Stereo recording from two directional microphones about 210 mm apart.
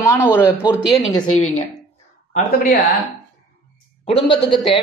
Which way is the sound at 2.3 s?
40° left (ahead or behind).